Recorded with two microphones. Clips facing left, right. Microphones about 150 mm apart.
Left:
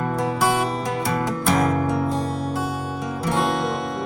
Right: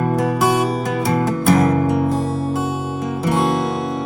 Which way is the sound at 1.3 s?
5° right (ahead or behind).